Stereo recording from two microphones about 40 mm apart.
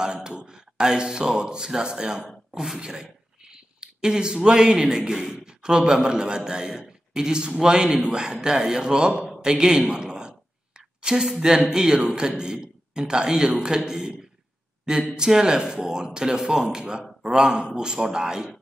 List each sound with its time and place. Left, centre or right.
0.0 s a man's voice: right
9.4 s a sound: centre
11.7 s a man's voice: centre
15.1 s a man's voice: centre